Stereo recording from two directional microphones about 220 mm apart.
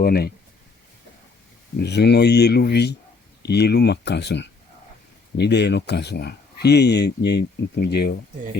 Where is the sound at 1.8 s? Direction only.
50° left (ahead or behind).